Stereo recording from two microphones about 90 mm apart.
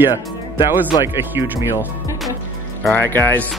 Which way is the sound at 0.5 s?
25° right (ahead or behind).